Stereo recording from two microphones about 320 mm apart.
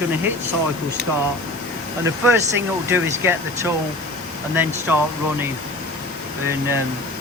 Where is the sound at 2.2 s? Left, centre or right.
Centre.